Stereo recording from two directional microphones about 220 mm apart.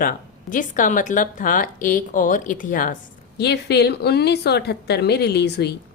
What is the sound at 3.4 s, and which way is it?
A woman's voice, 50° left (ahead or behind).